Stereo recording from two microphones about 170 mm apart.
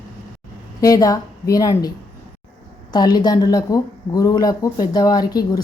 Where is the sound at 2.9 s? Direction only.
25° left (ahead or behind).